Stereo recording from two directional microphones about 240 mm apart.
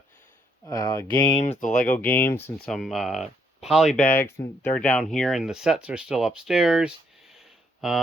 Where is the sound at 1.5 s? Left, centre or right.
Left.